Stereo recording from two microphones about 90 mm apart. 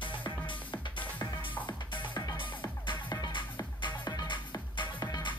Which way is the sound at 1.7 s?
65° left (ahead or behind).